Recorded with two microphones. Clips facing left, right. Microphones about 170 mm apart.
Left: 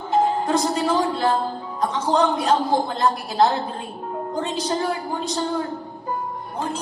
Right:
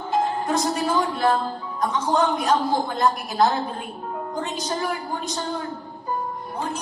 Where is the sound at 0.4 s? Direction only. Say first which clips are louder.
Left 2 dB; 30° left (ahead or behind).